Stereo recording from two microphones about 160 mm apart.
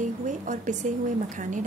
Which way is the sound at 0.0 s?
50° right (ahead or behind).